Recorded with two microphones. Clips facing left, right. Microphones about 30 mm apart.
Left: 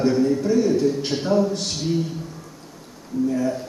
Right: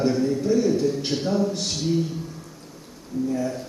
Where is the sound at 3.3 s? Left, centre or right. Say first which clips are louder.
Left 3 dB; centre.